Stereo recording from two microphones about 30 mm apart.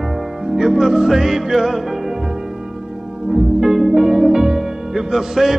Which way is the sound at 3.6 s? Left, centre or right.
Centre.